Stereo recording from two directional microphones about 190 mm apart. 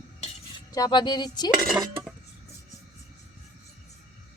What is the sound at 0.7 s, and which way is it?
Speech, 20° left (ahead or behind).